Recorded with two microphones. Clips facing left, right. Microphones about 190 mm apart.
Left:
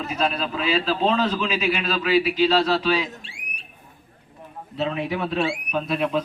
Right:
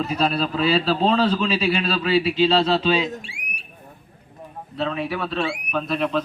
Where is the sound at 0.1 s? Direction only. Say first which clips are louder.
Right 3 dB; 35° right (ahead or behind).